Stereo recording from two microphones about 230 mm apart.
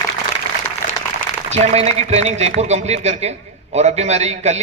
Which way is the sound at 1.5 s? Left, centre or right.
Right.